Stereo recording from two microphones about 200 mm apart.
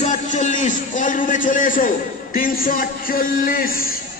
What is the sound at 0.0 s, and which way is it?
A man's voice, 35° left (ahead or behind).